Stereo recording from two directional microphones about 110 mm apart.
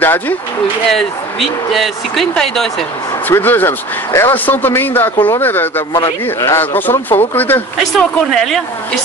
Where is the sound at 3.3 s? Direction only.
20° left (ahead or behind).